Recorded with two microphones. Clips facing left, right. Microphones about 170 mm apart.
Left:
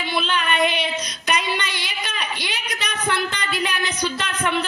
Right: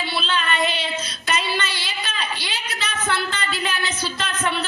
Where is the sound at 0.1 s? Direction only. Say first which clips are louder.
Left 3 dB; 15° left (ahead or behind).